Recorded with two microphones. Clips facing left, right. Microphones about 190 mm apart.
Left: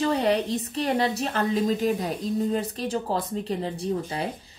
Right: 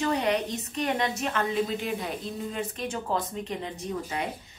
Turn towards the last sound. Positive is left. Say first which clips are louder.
# left 4 dB
turn(degrees=30)  # may be behind; listen again after turning